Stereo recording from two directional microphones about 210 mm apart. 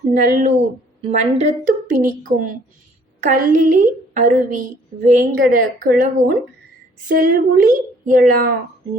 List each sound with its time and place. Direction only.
0.1 s a woman's voice: 40° right (ahead or behind)